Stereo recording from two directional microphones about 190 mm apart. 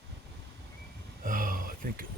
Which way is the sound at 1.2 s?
45° right (ahead or behind).